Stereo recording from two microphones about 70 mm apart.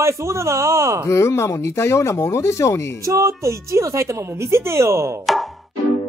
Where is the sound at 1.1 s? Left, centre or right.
Left.